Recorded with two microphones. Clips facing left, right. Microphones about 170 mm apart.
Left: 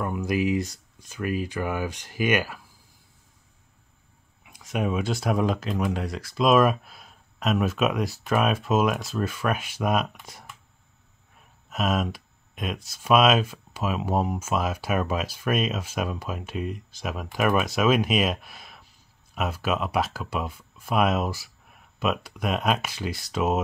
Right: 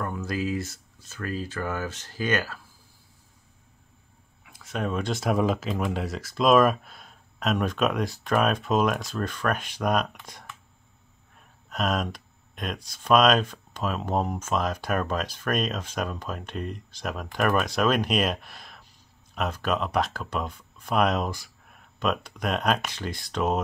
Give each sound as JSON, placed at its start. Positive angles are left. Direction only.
{"t": 0.0, "sound": "speech", "side_deg": 15}
{"t": 4.5, "sound": "speech", "side_deg": 15}